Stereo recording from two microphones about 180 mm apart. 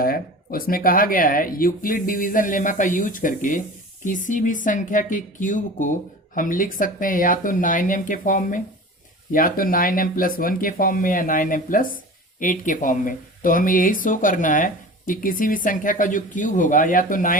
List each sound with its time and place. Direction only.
0.0 s speech: 55° left (ahead or behind)